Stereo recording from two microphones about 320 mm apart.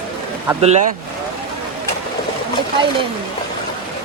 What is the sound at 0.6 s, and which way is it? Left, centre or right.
Speech, right.